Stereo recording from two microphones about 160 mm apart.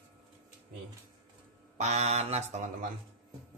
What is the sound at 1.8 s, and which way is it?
Mantra, 45° right (ahead or behind).